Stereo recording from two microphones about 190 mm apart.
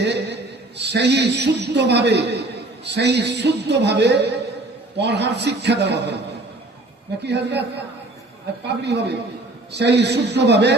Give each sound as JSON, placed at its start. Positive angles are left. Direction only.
{"t": 0.0, "sound": "a sound", "side_deg": -65}
{"t": 0.8, "sound": "a man's voice", "side_deg": -65}
{"t": 7.3, "sound": "a man's voice", "side_deg": -65}